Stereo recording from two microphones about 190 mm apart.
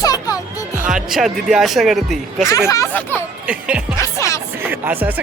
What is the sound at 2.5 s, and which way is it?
Speech, 15° left (ahead or behind).